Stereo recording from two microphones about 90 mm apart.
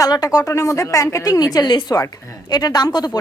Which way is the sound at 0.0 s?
40° left (ahead or behind).